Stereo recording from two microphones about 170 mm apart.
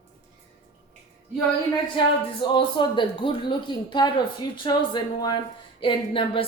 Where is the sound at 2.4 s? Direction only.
30° left (ahead or behind).